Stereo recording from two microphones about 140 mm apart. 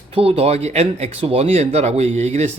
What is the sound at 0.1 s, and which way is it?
Speech, 45° right (ahead or behind).